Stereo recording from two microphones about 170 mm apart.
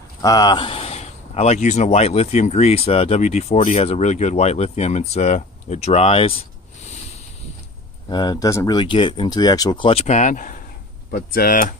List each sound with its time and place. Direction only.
0.2 s a man's voice: 20° left (ahead or behind)
8.1 s speech: 25° left (ahead or behind); by 11.7 s 60° left (ahead or behind)